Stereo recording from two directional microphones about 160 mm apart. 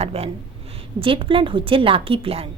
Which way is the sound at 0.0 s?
40° right (ahead or behind).